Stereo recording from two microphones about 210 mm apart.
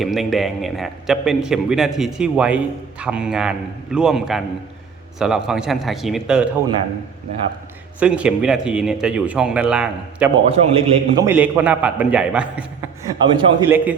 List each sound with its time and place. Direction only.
0.0 s a man's voice: centre (ahead or behind)
7.9 s a man's voice: 5° right (ahead or behind)
10.4 s a man's voice: 30° right (ahead or behind)
11.2 s a man's voice: 10° right (ahead or behind)
13.1 s a man's voice: 20° right (ahead or behind)
13.7 s a man's voice: 10° right (ahead or behind)